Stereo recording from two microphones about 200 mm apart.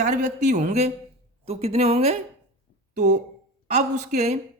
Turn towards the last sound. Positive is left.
turn(degrees=-35)  # may be behind; listen again after turning